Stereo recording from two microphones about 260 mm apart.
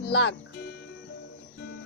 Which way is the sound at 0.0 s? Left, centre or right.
Left.